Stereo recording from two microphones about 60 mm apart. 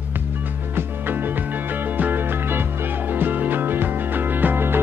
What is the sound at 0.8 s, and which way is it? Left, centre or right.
Music, right.